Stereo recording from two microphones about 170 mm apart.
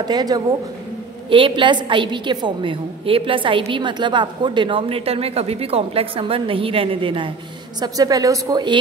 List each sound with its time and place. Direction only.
0.0 s a woman's voice: 25° right (ahead or behind)